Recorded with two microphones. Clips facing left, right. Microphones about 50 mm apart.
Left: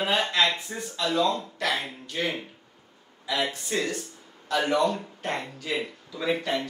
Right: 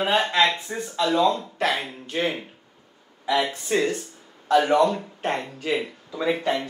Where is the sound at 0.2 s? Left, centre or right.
Centre.